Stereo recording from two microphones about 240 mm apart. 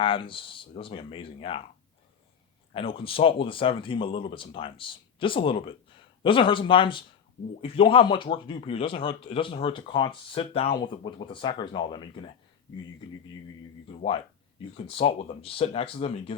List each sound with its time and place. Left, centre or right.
0.0 s speech: left
2.7 s speech: left
14.8 s speech: left